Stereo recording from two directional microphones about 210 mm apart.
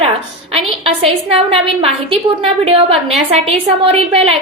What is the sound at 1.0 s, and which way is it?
A woman's voice, 30° right (ahead or behind).